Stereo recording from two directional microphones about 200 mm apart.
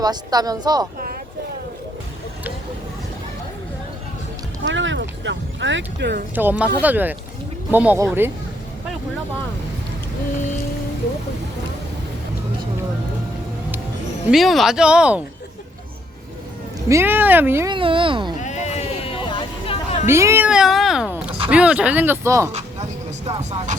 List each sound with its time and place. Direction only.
0.0 s speech: 20° right (ahead or behind)
4.6 s speech: 70° right (ahead or behind)
6.3 s speech: 10° right (ahead or behind)
14.3 s speech: centre (ahead or behind)
16.9 s speech: 10° right (ahead or behind)
17.7 s speech: 25° right (ahead or behind)
18.4 s sheep: 35° left (ahead or behind)
20.1 s speech: 15° right (ahead or behind)
22.5 s vehicle: 30° right (ahead or behind)